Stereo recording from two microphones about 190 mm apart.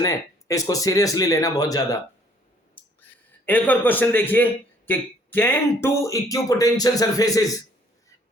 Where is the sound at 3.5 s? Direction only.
10° left (ahead or behind).